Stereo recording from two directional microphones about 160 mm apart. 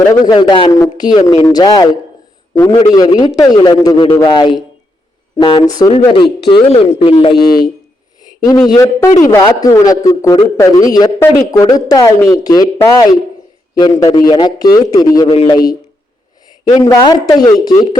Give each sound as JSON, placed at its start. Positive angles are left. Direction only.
{"t": 0.3, "sound": "a man's voice", "side_deg": 30}
{"t": 8.4, "sound": "a man's voice", "side_deg": 25}
{"t": 15.3, "sound": "a man's voice", "side_deg": 35}
{"t": 16.6, "sound": "a man's voice", "side_deg": 25}